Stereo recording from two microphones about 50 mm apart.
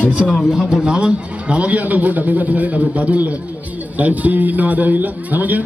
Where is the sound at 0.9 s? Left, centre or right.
Right.